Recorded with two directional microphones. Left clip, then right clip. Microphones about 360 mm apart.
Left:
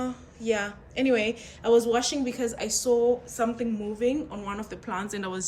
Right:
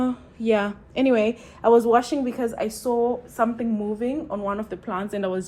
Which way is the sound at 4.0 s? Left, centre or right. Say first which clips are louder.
Right 1 dB; centre.